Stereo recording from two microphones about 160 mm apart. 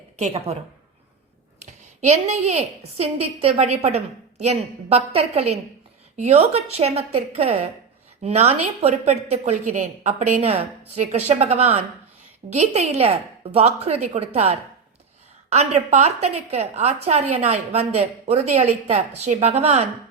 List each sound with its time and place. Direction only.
0.2 s a woman's voice: 40° right (ahead or behind)
1.6 s a woman's voice: 45° right (ahead or behind)